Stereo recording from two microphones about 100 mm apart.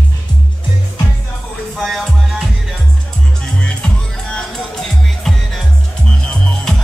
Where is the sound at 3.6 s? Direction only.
10° left (ahead or behind).